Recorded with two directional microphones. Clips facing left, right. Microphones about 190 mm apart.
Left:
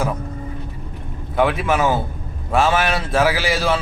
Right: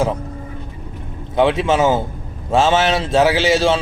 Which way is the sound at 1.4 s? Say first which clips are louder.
Right 3 dB; 25° right (ahead or behind).